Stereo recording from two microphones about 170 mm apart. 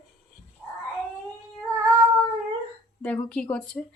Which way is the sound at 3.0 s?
5° left (ahead or behind).